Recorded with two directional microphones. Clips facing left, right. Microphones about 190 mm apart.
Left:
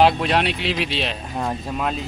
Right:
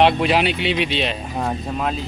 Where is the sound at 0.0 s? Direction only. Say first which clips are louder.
Right 1 dB; centre (ahead or behind).